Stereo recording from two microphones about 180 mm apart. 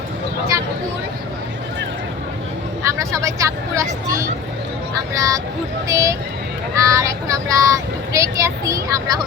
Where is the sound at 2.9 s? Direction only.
20° right (ahead or behind).